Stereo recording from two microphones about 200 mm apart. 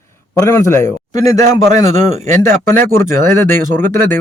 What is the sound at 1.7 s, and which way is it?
Speech, 35° right (ahead or behind).